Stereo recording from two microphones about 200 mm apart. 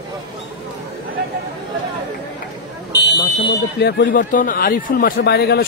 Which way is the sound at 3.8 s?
55° left (ahead or behind).